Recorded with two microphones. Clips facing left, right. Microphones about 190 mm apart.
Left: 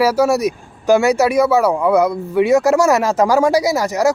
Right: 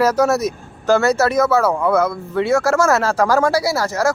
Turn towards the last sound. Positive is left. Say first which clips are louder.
# left 3 dB
turn(degrees=15)  # may be behind; listen again after turning